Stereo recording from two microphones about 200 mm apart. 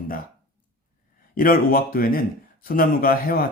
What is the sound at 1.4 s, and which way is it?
Speech, 45° left (ahead or behind).